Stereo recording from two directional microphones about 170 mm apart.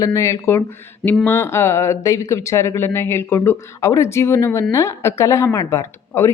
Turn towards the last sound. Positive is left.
turn(degrees=15)  # may be behind; listen again after turning